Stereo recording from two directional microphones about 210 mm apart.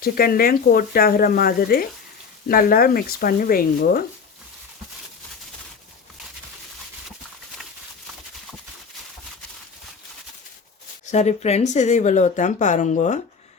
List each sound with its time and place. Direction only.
0.0 s speech: 45° left (ahead or behind)
11.1 s speech: 35° left (ahead or behind)